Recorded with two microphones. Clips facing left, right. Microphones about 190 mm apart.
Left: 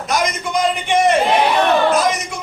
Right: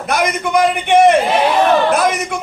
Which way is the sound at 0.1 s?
60° right (ahead or behind).